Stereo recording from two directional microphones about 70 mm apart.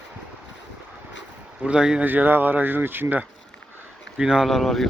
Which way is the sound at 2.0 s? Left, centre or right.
Right.